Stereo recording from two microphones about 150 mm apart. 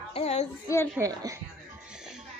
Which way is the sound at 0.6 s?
20° left (ahead or behind).